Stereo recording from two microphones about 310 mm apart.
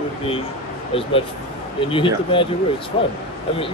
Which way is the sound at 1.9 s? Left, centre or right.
Centre.